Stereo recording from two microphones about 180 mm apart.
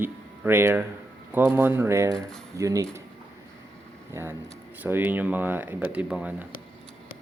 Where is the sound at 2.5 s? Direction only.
15° right (ahead or behind).